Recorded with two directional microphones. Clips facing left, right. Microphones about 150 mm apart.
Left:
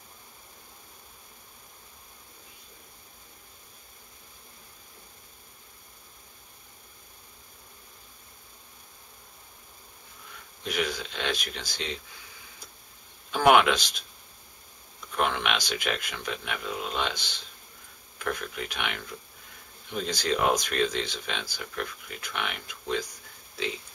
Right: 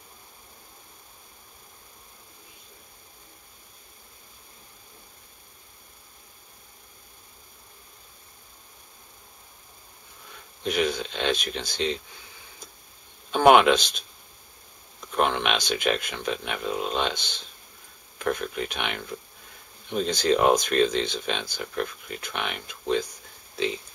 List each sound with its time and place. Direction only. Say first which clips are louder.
10.6 s speech: right 5 dB; 25° right (ahead or behind)
13.3 s speech: right 4 dB; 25° right (ahead or behind)
15.1 s speech: right 3 dB; 25° right (ahead or behind)